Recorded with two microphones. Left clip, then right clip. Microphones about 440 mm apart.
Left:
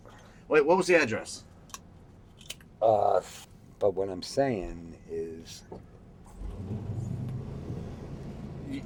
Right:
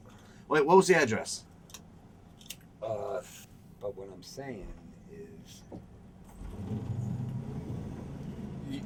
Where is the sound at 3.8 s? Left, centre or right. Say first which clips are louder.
Left 12 dB; left.